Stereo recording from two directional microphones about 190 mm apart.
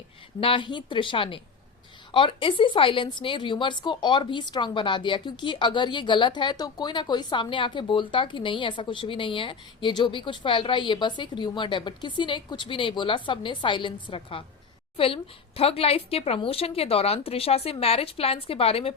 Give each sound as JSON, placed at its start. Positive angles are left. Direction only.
{"t": 0.3, "sound": "speech", "side_deg": 25}